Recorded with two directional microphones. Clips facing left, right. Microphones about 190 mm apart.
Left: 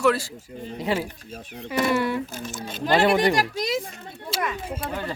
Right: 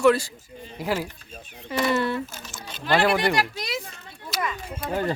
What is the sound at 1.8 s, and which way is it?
Speech, 10° left (ahead or behind).